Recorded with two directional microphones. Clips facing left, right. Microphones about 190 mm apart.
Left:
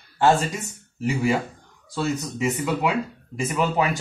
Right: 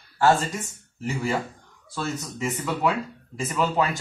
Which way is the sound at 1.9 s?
15° left (ahead or behind).